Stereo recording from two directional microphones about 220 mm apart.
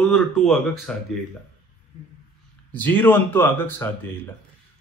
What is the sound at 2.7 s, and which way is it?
Speech, 10° left (ahead or behind).